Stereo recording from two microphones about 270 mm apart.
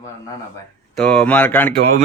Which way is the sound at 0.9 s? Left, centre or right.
Centre.